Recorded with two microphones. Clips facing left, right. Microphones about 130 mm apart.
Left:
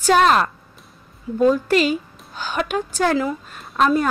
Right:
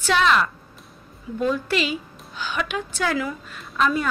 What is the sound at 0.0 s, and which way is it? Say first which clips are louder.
A woman's voice: left 4 dB; 45° left (ahead or behind).